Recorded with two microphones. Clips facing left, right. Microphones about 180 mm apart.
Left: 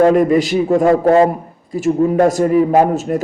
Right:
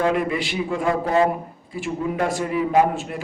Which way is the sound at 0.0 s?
40° left (ahead or behind).